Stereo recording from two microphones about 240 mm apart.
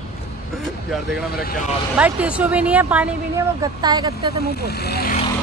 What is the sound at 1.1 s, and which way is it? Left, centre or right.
Speech, left.